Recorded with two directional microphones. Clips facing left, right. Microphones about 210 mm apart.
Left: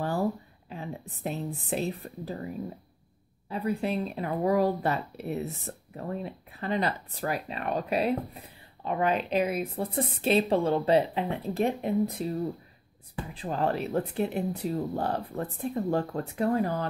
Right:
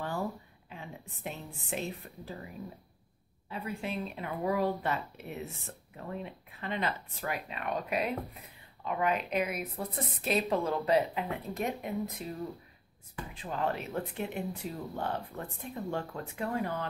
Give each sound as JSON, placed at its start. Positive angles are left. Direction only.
{"t": 0.7, "sound": "a woman's voice", "side_deg": 35}
{"t": 3.4, "sound": "speech", "side_deg": 40}